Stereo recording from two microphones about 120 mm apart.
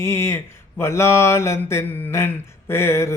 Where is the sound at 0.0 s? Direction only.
20° left (ahead or behind).